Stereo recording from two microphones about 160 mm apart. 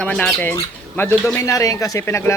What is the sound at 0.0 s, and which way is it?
Speech, 5° left (ahead or behind).